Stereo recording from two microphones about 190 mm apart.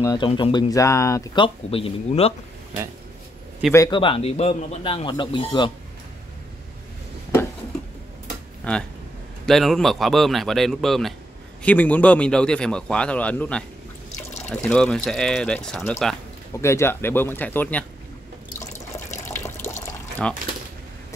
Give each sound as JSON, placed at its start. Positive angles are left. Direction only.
{"t": 0.0, "sound": "speech", "side_deg": 20}
{"t": 3.7, "sound": "speech", "side_deg": 20}
{"t": 8.7, "sound": "speech", "side_deg": 5}
{"t": 16.5, "sound": "speech", "side_deg": 15}
{"t": 19.2, "sound": "water", "side_deg": 10}
{"t": 20.2, "sound": "speech", "side_deg": 5}